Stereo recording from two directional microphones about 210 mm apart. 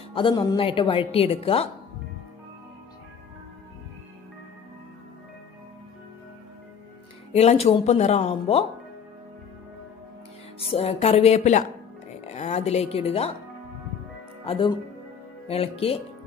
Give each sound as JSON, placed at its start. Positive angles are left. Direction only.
{"t": 0.1, "sound": "speech", "side_deg": 25}
{"t": 7.3, "sound": "speech", "side_deg": 30}
{"t": 10.6, "sound": "speech", "side_deg": 30}
{"t": 14.4, "sound": "speech", "side_deg": 25}